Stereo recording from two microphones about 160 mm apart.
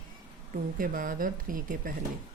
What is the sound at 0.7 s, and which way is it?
Speech, 60° right (ahead or behind).